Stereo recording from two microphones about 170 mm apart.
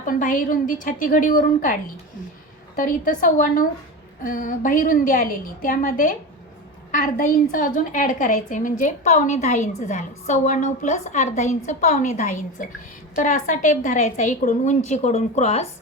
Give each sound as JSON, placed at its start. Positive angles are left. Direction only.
{"t": 0.0, "sound": "a woman's voice", "side_deg": 50}
{"t": 2.7, "sound": "a woman's voice", "side_deg": 55}